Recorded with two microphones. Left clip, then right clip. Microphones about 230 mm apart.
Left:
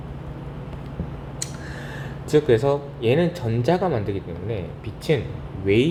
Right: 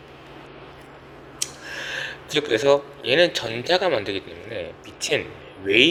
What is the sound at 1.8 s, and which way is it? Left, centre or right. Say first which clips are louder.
Speech: right 6 dB; right.